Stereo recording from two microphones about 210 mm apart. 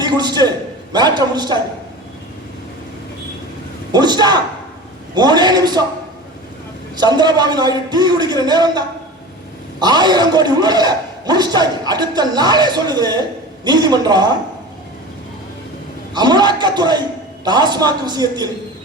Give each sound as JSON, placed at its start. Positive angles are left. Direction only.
{"t": 0.0, "sound": "a man's voice", "side_deg": -20}
{"t": 3.9, "sound": "a man's voice", "side_deg": -20}
{"t": 6.9, "sound": "a man's voice", "side_deg": -20}
{"t": 9.8, "sound": "a man's voice", "side_deg": -20}
{"t": 16.1, "sound": "a man's voice", "side_deg": -20}